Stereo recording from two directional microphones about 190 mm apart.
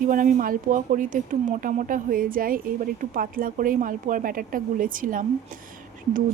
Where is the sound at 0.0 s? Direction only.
45° right (ahead or behind).